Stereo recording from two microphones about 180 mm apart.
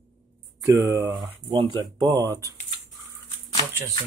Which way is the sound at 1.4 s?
25° right (ahead or behind).